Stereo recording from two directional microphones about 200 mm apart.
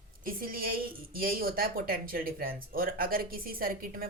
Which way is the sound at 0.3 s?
45° right (ahead or behind).